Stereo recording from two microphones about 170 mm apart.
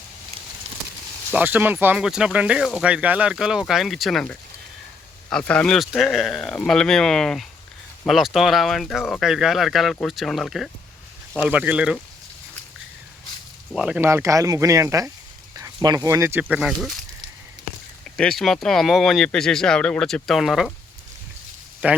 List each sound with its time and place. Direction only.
0.7 s a sound: 35° right (ahead or behind)
1.3 s speech: 10° right (ahead or behind)
13.7 s speech: 5° right (ahead or behind)
18.2 s speech: centre (ahead or behind)
21.8 s speech: 10° right (ahead or behind)